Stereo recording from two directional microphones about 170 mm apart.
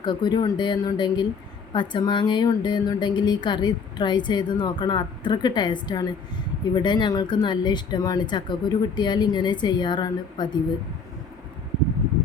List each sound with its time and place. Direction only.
0.0 s a woman's voice: 25° left (ahead or behind)